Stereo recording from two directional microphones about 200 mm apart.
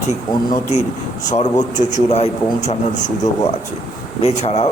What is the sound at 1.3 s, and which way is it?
A man's voice, 35° left (ahead or behind).